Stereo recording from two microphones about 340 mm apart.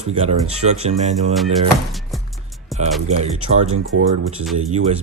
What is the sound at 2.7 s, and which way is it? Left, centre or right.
Music, centre.